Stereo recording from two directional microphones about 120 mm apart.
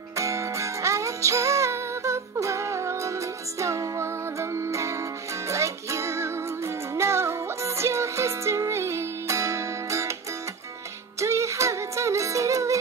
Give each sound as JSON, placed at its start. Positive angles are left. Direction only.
{"t": 0.1, "sound": "music", "side_deg": -25}
{"t": 11.1, "sound": "music", "side_deg": -25}